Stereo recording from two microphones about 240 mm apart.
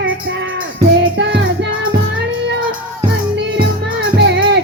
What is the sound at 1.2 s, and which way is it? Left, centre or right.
Music, right.